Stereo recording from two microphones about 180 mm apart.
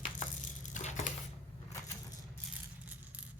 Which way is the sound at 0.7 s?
40° left (ahead or behind).